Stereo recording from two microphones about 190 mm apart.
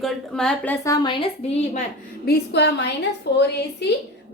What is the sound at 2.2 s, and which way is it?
A woman's voice, 60° left (ahead or behind).